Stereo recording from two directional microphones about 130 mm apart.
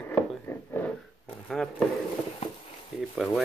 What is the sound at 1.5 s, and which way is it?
Speech, 5° left (ahead or behind).